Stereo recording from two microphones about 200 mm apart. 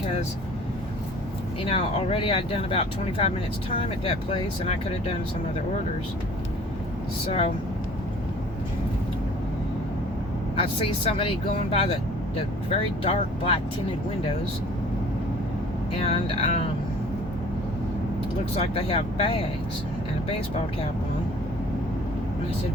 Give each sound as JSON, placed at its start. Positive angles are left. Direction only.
{"t": 1.6, "sound": "speech", "side_deg": 30}
{"t": 7.3, "sound": "speech", "side_deg": 30}
{"t": 10.6, "sound": "speech", "side_deg": 25}
{"t": 16.0, "sound": "speech", "side_deg": 30}
{"t": 18.5, "sound": "speech", "side_deg": 30}